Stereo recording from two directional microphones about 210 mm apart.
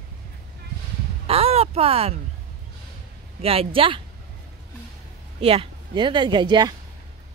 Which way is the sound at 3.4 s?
25° right (ahead or behind).